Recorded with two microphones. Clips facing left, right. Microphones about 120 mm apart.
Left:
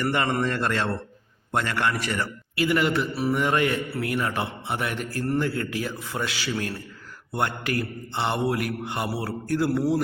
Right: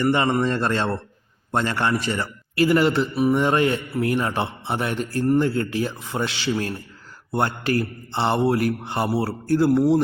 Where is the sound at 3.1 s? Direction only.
20° right (ahead or behind).